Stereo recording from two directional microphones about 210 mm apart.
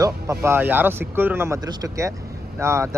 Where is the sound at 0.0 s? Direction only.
15° right (ahead or behind).